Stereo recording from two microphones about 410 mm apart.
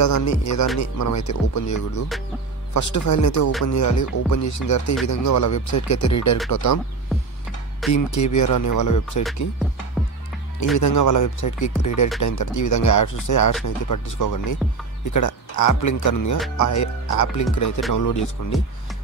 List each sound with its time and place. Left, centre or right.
0.0 s speech: left
7.9 s speech: left
10.0 s music: centre
10.8 s speech: left